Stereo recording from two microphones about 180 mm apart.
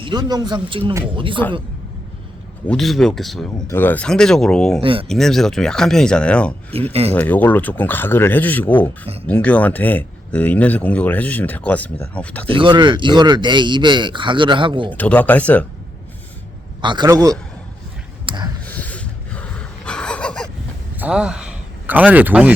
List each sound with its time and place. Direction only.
0.0 s speech: 25° right (ahead or behind)
2.6 s speech: centre (ahead or behind)
3.7 s speech: 10° left (ahead or behind)
4.8 s speech: 30° right (ahead or behind)
5.0 s speech: centre (ahead or behind)
6.7 s speech: 30° right (ahead or behind)
7.1 s speech: 10° left (ahead or behind)
12.5 s speech: 25° right (ahead or behind)
14.9 s speech: 10° left (ahead or behind)
16.8 s speech: 25° right (ahead or behind)
18.3 s a sound: 30° right (ahead or behind)
18.6 s a sound: 10° left (ahead or behind)
20.9 s speech: 5° right (ahead or behind)